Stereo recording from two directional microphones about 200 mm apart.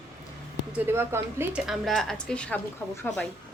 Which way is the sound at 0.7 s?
10° right (ahead or behind).